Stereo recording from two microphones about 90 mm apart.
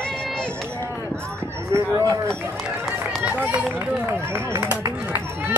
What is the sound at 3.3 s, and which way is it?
Speech, 20° right (ahead or behind).